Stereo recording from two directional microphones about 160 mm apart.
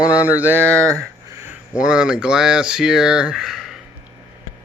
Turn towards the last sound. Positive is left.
turn(degrees=0)  # may be behind; listen again after turning